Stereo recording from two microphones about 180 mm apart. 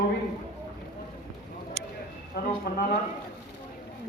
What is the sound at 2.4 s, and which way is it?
Speech, 65° left (ahead or behind).